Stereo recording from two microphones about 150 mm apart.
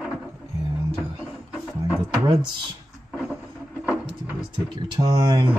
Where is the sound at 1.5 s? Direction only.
10° right (ahead or behind).